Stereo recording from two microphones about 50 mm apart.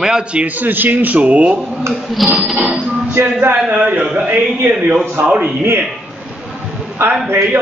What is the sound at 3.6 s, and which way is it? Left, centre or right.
Speech, right.